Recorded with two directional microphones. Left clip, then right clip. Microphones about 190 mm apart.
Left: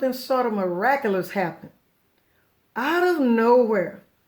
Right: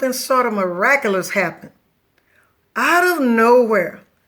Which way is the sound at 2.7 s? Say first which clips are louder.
Right 7 dB; 35° left (ahead or behind).